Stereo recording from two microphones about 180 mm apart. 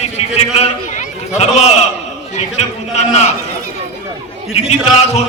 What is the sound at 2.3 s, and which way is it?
Mantra, 40° left (ahead or behind).